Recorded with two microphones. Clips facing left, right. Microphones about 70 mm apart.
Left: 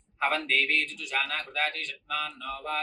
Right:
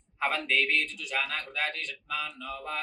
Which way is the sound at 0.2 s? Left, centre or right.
Left.